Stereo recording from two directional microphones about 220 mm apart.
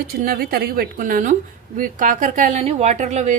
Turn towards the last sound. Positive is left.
turn(degrees=-30)  # may be behind; listen again after turning